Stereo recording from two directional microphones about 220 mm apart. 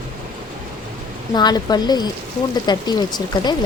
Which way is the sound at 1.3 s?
20° left (ahead or behind).